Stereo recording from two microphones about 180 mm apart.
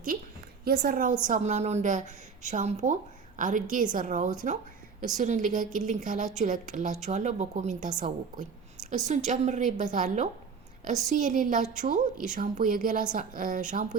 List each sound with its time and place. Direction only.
0.6 s a woman's voice: 55° right (ahead or behind)